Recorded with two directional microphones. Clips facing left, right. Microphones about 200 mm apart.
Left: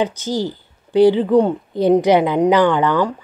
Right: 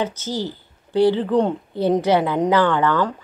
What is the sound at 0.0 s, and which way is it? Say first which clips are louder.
A woman's voice: left 4 dB; 15° left (ahead or behind).